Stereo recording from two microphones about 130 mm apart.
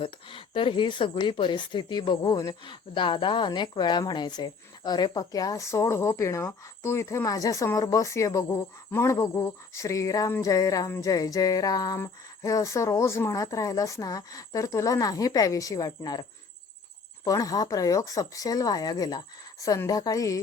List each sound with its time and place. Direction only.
0.0 s a woman's voice: 40° left (ahead or behind)
17.2 s a woman's voice: 25° left (ahead or behind)